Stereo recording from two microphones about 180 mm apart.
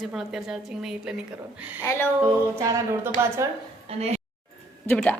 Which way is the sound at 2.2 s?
15° right (ahead or behind).